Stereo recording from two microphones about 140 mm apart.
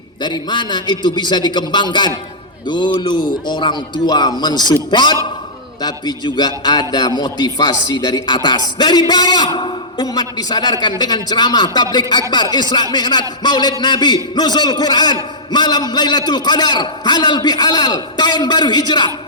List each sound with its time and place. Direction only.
0.2 s a man's voice: 30° left (ahead or behind)